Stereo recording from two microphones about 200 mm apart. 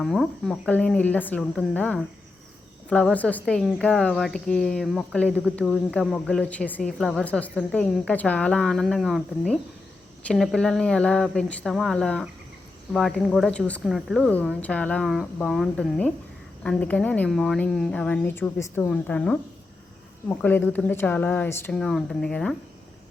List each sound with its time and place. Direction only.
0.0 s speech: centre (ahead or behind)